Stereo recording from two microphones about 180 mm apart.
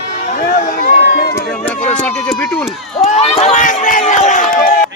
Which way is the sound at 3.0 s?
35° left (ahead or behind).